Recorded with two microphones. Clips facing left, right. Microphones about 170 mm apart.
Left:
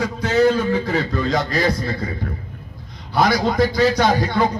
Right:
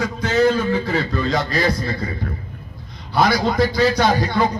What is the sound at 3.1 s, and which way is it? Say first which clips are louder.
A man's voice: even; 45° left (ahead or behind).